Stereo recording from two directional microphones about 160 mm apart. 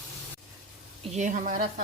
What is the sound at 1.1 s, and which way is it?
Dishes, 50° right (ahead or behind).